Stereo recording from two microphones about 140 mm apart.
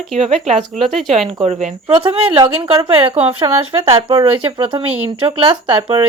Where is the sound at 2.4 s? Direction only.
35° right (ahead or behind).